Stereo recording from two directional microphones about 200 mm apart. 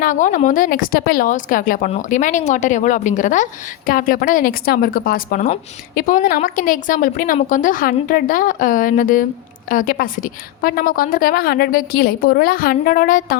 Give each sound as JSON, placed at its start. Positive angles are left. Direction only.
{"t": 0.0, "sound": "a woman's voice", "side_deg": 40}